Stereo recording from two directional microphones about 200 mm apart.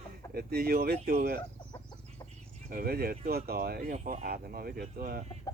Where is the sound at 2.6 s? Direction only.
50° right (ahead or behind).